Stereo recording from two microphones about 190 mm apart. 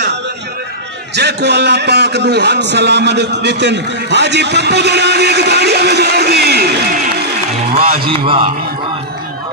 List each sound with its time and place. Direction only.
1.1 s a man's voice: 65° right (ahead or behind)
8.1 s a man's voice: 30° right (ahead or behind)